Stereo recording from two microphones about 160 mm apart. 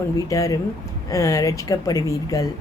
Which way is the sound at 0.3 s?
20° left (ahead or behind).